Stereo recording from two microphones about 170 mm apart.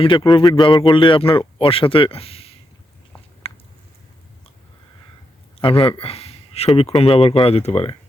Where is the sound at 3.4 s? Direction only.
35° left (ahead or behind).